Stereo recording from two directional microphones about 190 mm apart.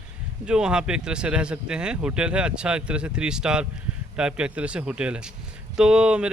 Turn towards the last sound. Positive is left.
turn(degrees=-5)  # may be behind; listen again after turning